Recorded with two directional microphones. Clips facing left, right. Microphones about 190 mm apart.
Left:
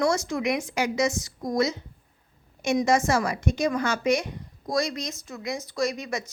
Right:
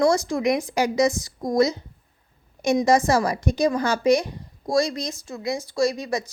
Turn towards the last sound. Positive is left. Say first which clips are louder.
# right 5 dB
turn(degrees=-35)  # may be behind; listen again after turning